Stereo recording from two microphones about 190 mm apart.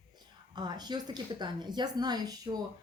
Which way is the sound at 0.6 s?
20° right (ahead or behind).